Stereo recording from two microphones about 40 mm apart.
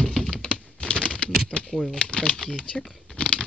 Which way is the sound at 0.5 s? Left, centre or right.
Left.